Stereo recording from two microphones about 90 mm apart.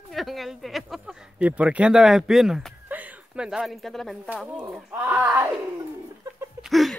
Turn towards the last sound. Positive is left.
turn(degrees=0)  # may be behind; listen again after turning